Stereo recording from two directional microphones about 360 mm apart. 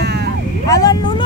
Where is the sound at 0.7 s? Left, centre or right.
Centre.